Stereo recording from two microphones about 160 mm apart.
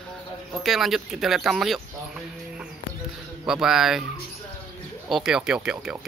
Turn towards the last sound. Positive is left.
turn(degrees=-5)  # may be behind; listen again after turning